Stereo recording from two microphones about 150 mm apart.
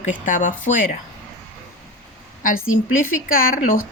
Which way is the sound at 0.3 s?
60° left (ahead or behind).